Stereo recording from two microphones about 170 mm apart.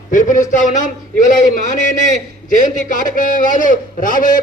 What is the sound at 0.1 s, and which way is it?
A man's voice, 50° left (ahead or behind).